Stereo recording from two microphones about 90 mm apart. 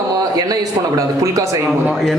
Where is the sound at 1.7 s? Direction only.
Centre (ahead or behind).